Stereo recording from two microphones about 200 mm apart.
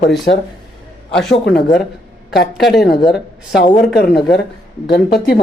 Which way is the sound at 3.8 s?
55° left (ahead or behind).